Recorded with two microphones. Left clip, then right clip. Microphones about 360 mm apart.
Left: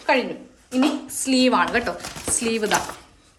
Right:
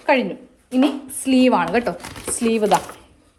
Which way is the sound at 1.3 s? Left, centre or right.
Centre.